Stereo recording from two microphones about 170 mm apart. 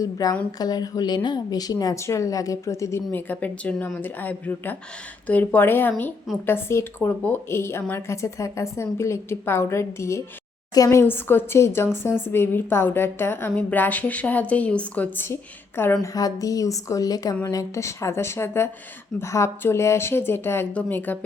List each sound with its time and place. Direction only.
0.0 s a woman's voice: 20° left (ahead or behind)